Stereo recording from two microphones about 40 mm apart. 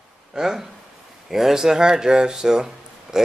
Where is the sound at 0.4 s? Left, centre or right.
Centre.